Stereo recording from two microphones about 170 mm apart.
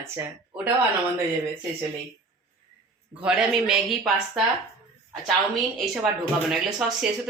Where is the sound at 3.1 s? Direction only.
5° right (ahead or behind).